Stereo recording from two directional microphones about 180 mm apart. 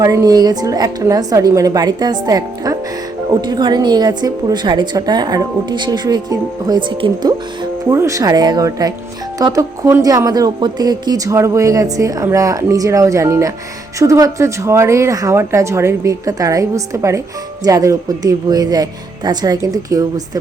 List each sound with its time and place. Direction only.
0.0 s a woman's voice: 20° right (ahead or behind)